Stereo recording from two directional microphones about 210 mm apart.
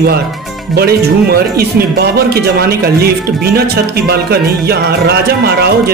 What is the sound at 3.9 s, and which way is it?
A man's voice, 50° right (ahead or behind).